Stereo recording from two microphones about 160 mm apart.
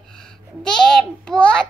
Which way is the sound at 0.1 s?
5° left (ahead or behind).